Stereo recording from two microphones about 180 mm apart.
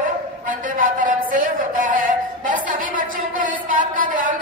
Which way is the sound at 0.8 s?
50° right (ahead or behind).